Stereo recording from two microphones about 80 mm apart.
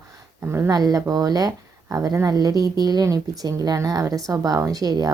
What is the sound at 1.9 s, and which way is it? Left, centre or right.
Speech, right.